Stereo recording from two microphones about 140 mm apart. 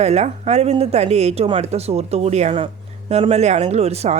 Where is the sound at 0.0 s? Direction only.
50° right (ahead or behind).